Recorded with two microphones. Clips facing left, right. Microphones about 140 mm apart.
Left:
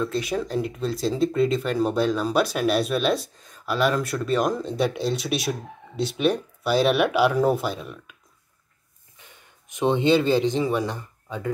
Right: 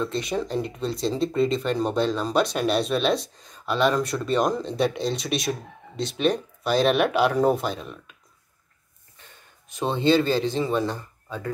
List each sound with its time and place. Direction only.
0.0 s speech: 5° left (ahead or behind)
9.2 s speech: 15° left (ahead or behind)